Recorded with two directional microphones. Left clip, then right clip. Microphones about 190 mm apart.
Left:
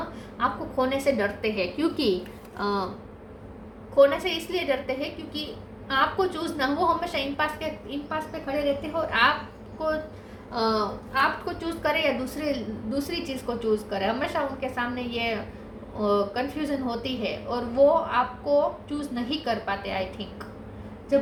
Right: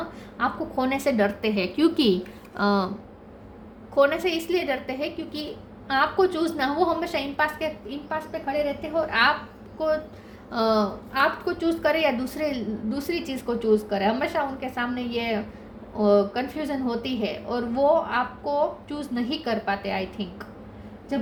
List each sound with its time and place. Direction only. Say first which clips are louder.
0.3 s a woman's voice: even; 55° right (ahead or behind)
3.9 s a woman's voice: left 1 dB; 55° right (ahead or behind)
10.5 s a woman's voice: right 3 dB; 60° right (ahead or behind)